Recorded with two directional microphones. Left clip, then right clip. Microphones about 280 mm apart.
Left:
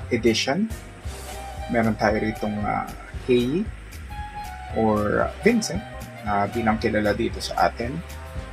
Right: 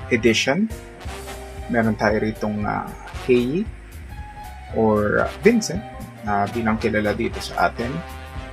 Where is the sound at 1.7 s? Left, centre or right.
Centre.